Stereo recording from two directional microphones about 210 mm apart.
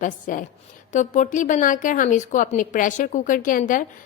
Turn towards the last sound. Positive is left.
turn(degrees=40)  # may be behind; listen again after turning